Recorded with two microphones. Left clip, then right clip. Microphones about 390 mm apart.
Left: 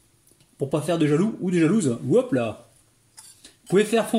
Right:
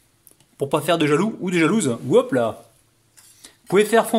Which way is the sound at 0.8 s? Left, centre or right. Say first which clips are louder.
Right 3 dB; right.